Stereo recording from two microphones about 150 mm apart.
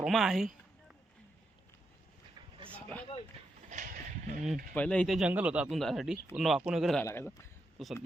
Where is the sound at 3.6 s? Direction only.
60° right (ahead or behind).